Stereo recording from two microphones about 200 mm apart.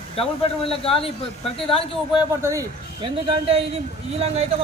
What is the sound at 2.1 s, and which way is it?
A man's voice, 10° right (ahead or behind).